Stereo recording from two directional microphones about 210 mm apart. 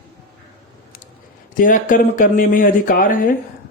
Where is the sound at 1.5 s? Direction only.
40° left (ahead or behind).